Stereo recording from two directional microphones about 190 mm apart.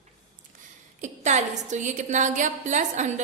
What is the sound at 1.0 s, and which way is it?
A woman's voice, 40° right (ahead or behind).